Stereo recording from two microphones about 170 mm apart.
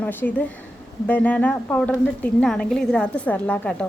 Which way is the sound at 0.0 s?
10° left (ahead or behind).